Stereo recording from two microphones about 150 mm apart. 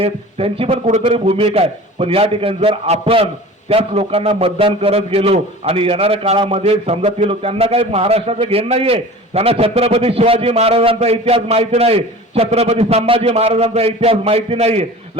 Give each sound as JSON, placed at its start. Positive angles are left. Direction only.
{"t": 0.0, "sound": "a man's voice", "side_deg": -40}